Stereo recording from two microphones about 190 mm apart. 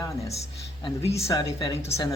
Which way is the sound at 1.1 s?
15° left (ahead or behind).